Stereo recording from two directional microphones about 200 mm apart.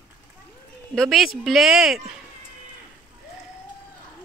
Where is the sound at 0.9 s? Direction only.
Centre (ahead or behind).